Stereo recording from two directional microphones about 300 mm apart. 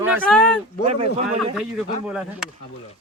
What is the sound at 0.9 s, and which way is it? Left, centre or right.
Speech, right.